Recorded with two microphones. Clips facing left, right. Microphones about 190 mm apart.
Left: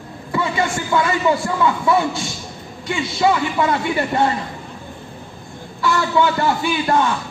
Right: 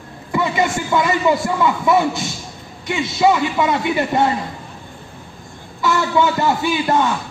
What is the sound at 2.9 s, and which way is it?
Speech, 20° right (ahead or behind).